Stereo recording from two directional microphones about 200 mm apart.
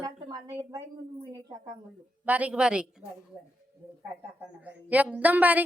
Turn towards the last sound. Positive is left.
turn(degrees=-10)  # may be behind; listen again after turning